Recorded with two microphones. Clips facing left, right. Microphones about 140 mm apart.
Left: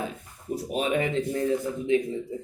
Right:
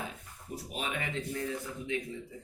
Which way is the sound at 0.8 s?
30° left (ahead or behind).